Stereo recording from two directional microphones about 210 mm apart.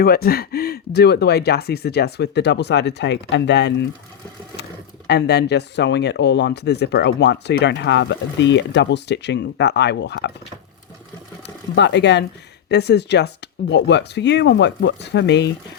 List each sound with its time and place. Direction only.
0.0 s speech: 45° left (ahead or behind)
5.0 s speech: 55° left (ahead or behind)
11.4 s speech: 55° left (ahead or behind)